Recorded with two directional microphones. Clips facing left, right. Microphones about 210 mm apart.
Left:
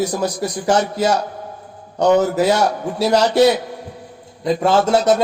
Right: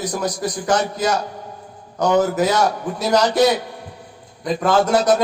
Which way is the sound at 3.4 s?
25° left (ahead or behind).